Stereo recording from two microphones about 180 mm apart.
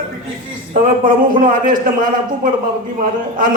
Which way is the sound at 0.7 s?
50° right (ahead or behind).